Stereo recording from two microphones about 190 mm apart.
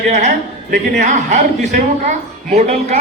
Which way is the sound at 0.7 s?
40° right (ahead or behind).